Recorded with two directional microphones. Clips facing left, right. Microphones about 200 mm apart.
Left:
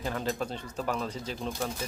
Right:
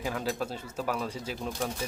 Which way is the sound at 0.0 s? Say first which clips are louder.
Even; 5° right (ahead or behind).